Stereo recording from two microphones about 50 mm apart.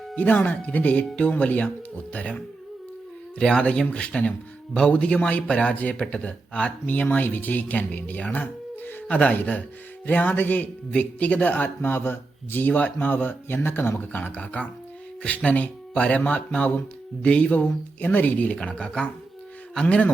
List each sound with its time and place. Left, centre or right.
0.2 s a man's voice: left
6.8 s a man's voice: left
16.6 s speech: left
17.2 s speech: left
18.5 s a man's voice: centre
19.8 s a man's voice: left